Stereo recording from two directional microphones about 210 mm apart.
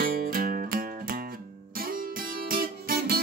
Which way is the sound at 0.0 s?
45° right (ahead or behind).